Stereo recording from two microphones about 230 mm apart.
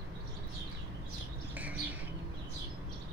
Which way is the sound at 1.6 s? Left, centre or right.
Centre.